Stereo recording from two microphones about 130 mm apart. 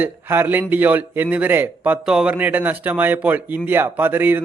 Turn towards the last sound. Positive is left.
turn(degrees=-15)  # may be behind; listen again after turning